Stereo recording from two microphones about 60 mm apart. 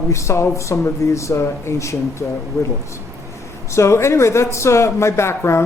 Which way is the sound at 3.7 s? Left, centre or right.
Left.